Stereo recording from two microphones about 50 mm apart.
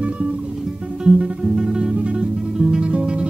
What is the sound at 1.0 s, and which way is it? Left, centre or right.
Music, centre.